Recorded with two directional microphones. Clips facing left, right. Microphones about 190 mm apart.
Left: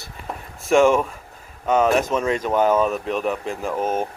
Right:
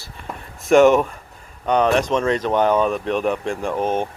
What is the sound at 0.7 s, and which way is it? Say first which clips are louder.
Speech: right 3 dB; centre (ahead or behind).